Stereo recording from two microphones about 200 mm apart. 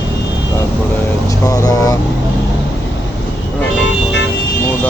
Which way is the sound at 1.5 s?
20° left (ahead or behind).